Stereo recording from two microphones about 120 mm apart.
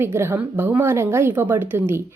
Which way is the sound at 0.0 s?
20° right (ahead or behind).